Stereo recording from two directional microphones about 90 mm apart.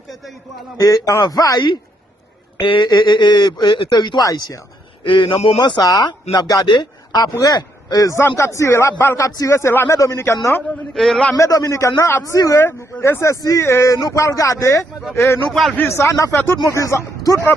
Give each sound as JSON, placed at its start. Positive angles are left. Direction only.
{"t": 0.8, "sound": "speech", "side_deg": 45}
{"t": 2.6, "sound": "speech", "side_deg": 55}
{"t": 4.2, "sound": "a man's voice", "side_deg": 40}
{"t": 5.0, "sound": "a man's voice", "side_deg": 65}
{"t": 5.5, "sound": "a man's voice", "side_deg": 45}
{"t": 10.9, "sound": "a man's voice", "side_deg": 5}
{"t": 11.3, "sound": "a man's voice", "side_deg": 40}
{"t": 15.4, "sound": "a man's voice", "side_deg": 5}
{"t": 15.8, "sound": "a man's voice", "side_deg": 30}